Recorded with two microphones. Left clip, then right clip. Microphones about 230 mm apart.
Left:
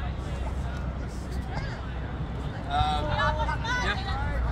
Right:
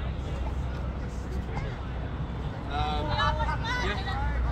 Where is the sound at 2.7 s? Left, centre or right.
Left.